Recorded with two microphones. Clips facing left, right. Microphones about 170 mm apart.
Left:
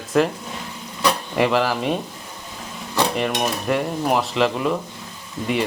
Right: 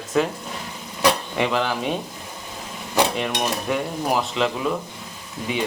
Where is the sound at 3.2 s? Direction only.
Centre (ahead or behind).